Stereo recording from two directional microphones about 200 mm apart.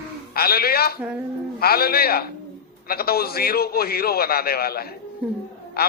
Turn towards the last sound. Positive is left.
turn(degrees=50)  # may be behind; listen again after turning